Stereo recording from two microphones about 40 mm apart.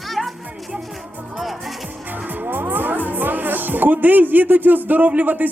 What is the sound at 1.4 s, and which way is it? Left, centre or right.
Speech, centre.